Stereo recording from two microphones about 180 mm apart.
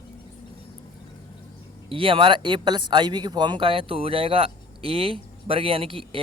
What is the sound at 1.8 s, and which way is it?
Speech, 30° right (ahead or behind).